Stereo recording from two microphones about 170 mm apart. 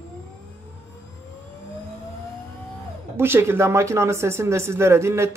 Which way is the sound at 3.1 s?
15° right (ahead or behind).